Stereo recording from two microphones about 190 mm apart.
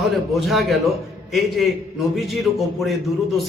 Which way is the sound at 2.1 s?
Centre (ahead or behind).